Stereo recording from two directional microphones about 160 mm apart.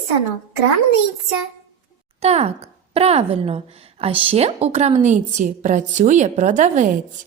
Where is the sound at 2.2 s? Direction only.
40° right (ahead or behind).